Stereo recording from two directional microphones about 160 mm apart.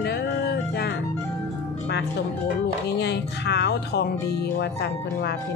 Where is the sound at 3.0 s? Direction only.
90° left.